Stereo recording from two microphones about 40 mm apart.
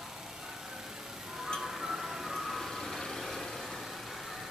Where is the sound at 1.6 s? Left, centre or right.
Centre.